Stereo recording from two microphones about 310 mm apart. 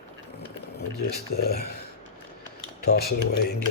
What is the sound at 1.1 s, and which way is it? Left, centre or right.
Speech, left.